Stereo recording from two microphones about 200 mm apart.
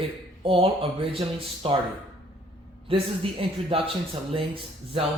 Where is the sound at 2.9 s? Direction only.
25° right (ahead or behind).